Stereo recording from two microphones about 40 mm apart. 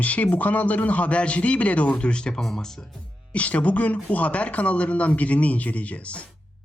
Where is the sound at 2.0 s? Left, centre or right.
Left.